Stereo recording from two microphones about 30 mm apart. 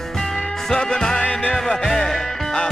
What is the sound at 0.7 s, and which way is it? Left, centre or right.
Music, left.